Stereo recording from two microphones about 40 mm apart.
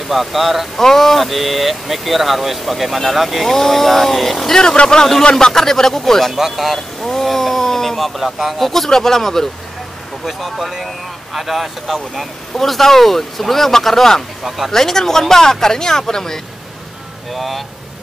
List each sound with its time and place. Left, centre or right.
0.1 s speech: centre
0.7 s speech: centre
4.9 s speech: centre
6.3 s speech: centre
8.2 s speech: centre
17.3 s speech: centre